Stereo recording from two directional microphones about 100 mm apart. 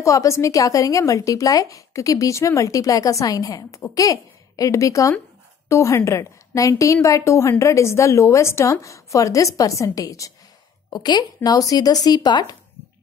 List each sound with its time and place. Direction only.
0.0 s a woman's voice: 30° left (ahead or behind)
10.9 s speech: 45° left (ahead or behind)